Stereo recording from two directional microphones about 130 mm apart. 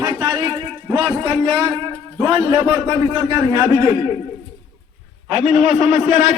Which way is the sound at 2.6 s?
10° right (ahead or behind).